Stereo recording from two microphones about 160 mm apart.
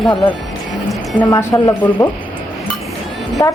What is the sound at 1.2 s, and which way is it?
Speech, 20° left (ahead or behind).